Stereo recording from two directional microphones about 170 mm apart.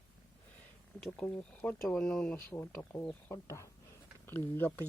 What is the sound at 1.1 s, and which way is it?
Speech, 5° left (ahead or behind).